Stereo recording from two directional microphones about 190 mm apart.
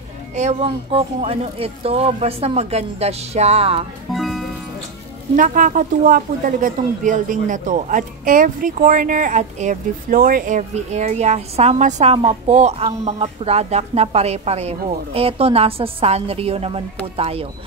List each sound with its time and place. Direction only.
0.4 s speech: 35° right (ahead or behind)
4.1 s music: centre (ahead or behind)
5.3 s speech: 45° right (ahead or behind)